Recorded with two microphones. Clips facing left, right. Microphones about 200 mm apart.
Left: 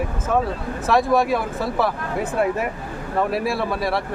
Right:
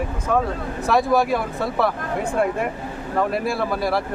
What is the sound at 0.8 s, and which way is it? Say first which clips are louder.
A man's voice: even; centre (ahead or behind).